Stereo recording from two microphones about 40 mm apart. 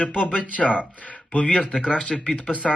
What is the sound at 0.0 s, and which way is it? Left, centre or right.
Speech, right.